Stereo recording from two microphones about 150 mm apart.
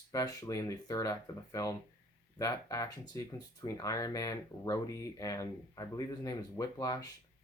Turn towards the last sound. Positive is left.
turn(degrees=25)  # may be behind; listen again after turning